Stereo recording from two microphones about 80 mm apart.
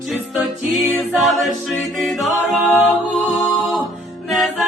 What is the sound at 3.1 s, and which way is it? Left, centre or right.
Music, centre.